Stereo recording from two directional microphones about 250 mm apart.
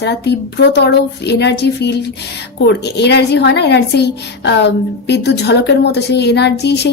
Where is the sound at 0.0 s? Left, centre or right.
Left.